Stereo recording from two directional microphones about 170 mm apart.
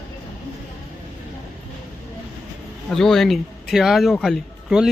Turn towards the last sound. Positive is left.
turn(degrees=0)  # may be behind; listen again after turning